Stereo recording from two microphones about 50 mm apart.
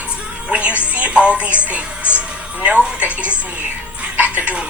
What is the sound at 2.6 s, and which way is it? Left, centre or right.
Speech, right.